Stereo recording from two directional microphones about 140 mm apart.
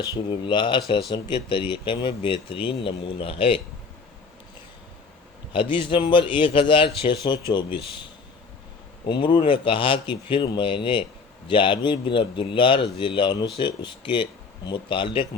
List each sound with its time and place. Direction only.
0.3 s a man's voice: 35° left (ahead or behind)
5.5 s a man's voice: 35° left (ahead or behind)
9.0 s a man's voice: 35° left (ahead or behind)